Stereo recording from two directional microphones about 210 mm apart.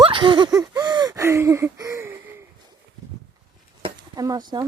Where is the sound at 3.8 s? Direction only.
20° right (ahead or behind).